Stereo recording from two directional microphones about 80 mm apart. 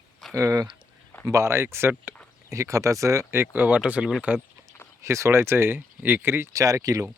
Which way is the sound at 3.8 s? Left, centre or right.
Centre.